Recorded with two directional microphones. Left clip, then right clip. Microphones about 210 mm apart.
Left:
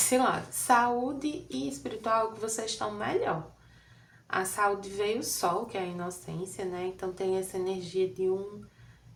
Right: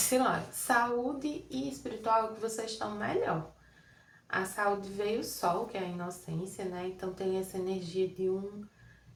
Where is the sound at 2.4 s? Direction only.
30° left (ahead or behind).